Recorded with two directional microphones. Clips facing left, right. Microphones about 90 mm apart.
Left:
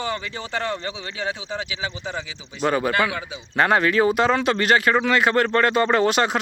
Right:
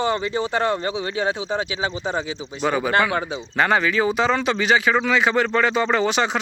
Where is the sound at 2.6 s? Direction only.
Centre (ahead or behind).